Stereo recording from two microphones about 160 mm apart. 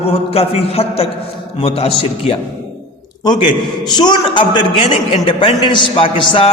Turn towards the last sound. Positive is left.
turn(degrees=35)  # may be behind; listen again after turning